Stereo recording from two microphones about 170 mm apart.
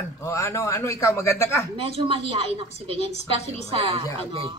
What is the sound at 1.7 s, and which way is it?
A woman's voice, 35° right (ahead or behind).